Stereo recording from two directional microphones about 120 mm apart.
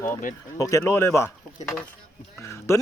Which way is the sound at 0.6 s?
25° left (ahead or behind).